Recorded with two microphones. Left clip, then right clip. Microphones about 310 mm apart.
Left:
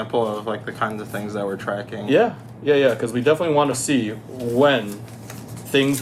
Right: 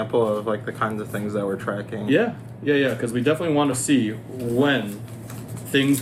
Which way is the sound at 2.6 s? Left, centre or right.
Centre.